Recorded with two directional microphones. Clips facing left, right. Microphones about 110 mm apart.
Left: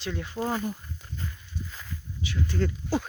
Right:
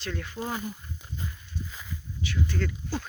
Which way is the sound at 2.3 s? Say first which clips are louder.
Left 2 dB; 30° left (ahead or behind).